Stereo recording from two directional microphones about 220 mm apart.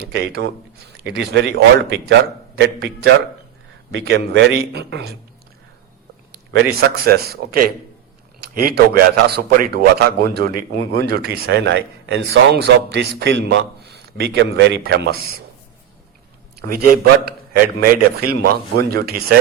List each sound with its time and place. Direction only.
0.1 s a man's voice: 50° right (ahead or behind)
3.9 s a man's voice: 50° right (ahead or behind)
6.5 s a man's voice: 45° right (ahead or behind)
16.6 s a man's voice: 40° right (ahead or behind)